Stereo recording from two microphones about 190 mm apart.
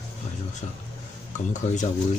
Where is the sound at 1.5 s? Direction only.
40° left (ahead or behind).